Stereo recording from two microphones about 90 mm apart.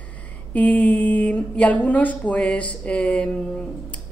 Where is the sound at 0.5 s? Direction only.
15° left (ahead or behind).